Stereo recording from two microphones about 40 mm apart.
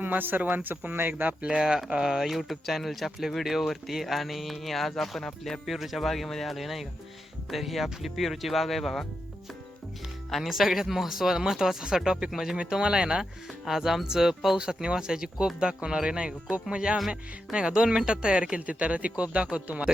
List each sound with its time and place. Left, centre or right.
0.0 s a man's voice: right
1.3 s speech: right
1.5 s speech: centre
2.2 s speech: centre
5.6 s speech: centre
6.1 s speech: centre
10.5 s speech: centre
12.5 s speech: right
17.7 s speech: centre; by 19.9 s right